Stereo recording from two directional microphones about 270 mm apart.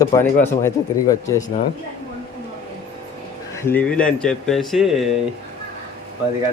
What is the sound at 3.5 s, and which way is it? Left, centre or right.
Speech, centre.